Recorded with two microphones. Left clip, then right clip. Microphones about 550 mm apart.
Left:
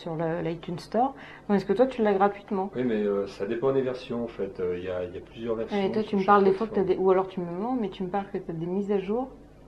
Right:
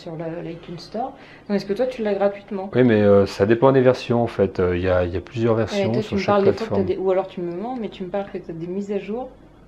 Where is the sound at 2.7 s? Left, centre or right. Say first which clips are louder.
Right 14 dB; right.